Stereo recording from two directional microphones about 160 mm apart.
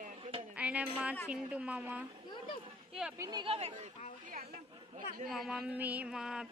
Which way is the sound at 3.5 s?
40° right (ahead or behind).